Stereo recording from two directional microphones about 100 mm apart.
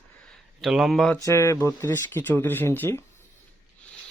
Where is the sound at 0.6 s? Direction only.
Centre (ahead or behind).